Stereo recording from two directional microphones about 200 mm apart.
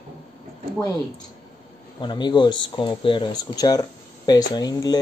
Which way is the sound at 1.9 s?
20° left (ahead or behind).